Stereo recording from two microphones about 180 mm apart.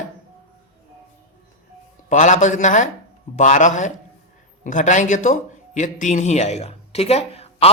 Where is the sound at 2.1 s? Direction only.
45° left (ahead or behind).